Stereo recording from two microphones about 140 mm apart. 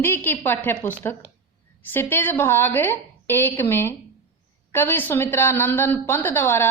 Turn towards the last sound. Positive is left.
turn(degrees=15)  # may be behind; listen again after turning